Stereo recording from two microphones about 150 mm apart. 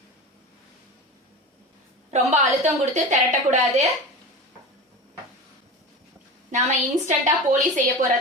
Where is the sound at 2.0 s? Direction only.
45° right (ahead or behind).